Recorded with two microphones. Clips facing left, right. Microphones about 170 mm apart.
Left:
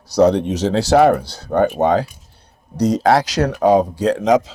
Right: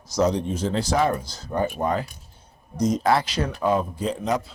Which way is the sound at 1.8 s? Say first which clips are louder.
Left 9 dB; 90° left.